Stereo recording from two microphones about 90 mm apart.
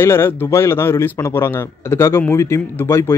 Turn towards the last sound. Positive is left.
turn(degrees=30)  # may be behind; listen again after turning